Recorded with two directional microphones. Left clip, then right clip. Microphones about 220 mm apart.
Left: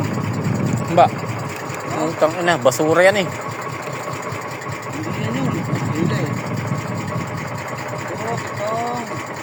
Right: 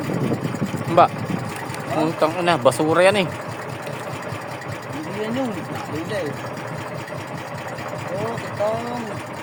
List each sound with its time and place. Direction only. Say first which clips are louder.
1.0 s speech: left 1 dB; 20° right (ahead or behind)
2.2 s speech: left 2 dB; centre (ahead or behind)